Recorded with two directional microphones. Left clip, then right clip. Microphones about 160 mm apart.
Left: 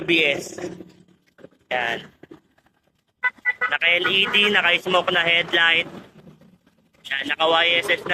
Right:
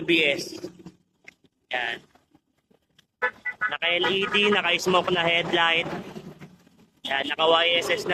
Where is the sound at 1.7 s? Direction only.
15° right (ahead or behind).